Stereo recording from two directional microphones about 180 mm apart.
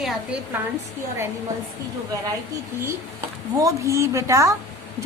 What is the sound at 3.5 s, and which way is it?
A woman's voice, 15° right (ahead or behind).